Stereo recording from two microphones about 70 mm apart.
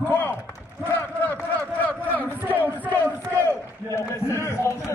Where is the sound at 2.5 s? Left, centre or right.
Right.